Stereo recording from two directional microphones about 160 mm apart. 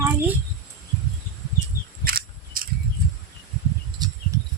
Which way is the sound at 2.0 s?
65° right (ahead or behind).